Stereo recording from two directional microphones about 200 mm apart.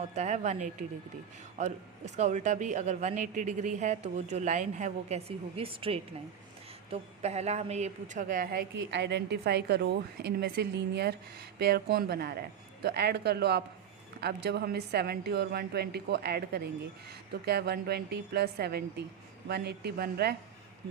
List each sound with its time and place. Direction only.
0.0 s speech: 35° right (ahead or behind)
8.8 s a woman's voice: 60° right (ahead or behind)